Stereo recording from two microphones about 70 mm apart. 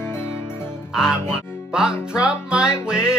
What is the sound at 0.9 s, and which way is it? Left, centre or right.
Music, centre.